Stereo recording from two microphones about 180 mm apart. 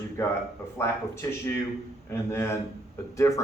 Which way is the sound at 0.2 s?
15° left (ahead or behind).